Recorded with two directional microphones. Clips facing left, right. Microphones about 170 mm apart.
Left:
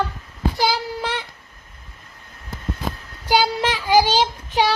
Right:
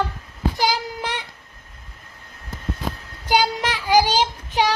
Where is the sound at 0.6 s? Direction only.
15° right (ahead or behind).